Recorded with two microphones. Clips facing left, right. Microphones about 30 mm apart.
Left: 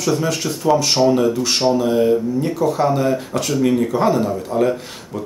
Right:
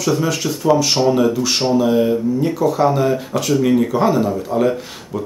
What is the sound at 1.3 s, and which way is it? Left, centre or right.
Speech, centre.